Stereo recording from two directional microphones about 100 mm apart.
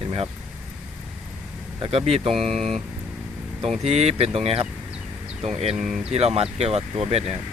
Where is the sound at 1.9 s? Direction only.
90° right.